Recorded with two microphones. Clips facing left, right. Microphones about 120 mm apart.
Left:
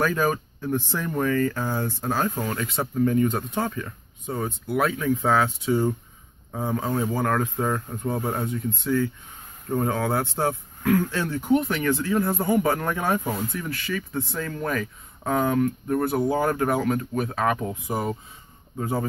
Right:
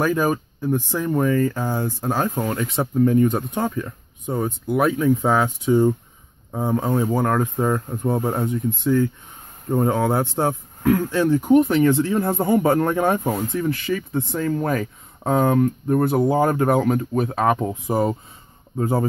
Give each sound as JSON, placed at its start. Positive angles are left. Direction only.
{"t": 0.0, "sound": "speech", "side_deg": -15}